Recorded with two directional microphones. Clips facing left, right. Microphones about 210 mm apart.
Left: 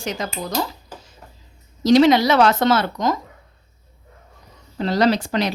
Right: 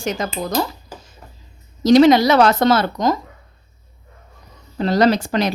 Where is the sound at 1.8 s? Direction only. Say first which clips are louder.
Right 3 dB; 45° right (ahead or behind).